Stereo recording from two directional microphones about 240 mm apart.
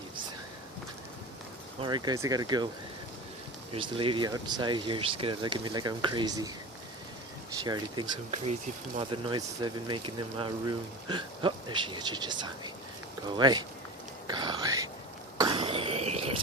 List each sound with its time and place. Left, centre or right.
1.8 s speech: centre
3.7 s speech: right
7.6 s speech: centre
14.3 s a sound: centre